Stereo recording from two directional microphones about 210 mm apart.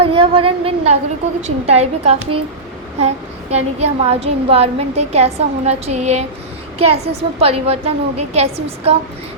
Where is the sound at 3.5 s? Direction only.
30° right (ahead or behind).